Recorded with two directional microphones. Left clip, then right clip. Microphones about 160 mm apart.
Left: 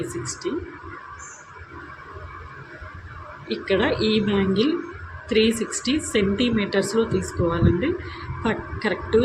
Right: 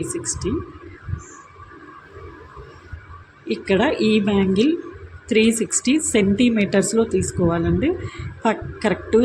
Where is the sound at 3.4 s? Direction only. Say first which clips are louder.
Right 3 dB; 50° right (ahead or behind).